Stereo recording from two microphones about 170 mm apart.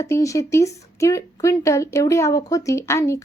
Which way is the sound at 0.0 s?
20° left (ahead or behind).